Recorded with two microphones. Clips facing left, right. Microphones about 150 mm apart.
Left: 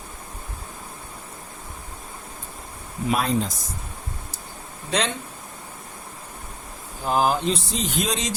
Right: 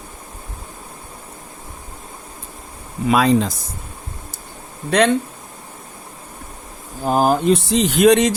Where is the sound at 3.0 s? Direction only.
90° right.